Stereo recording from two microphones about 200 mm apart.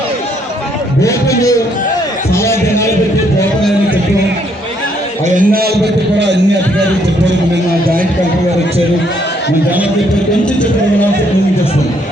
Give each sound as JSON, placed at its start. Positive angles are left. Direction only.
{"t": 1.0, "sound": "a man's voice", "side_deg": 15}
{"t": 2.3, "sound": "music", "side_deg": 15}
{"t": 5.3, "sound": "a man's voice", "side_deg": -45}